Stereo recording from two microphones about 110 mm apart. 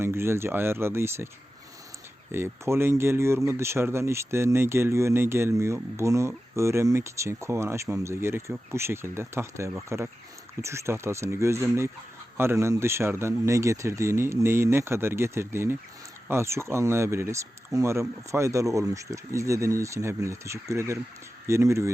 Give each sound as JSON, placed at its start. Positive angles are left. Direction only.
{"t": 0.0, "sound": "speech", "side_deg": -25}
{"t": 2.3, "sound": "speech", "side_deg": -20}